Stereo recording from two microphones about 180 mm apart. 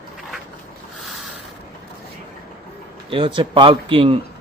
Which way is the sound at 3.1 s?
30° right (ahead or behind).